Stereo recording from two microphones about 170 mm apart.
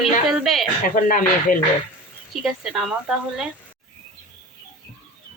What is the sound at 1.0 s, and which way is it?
Speech, 55° left (ahead or behind).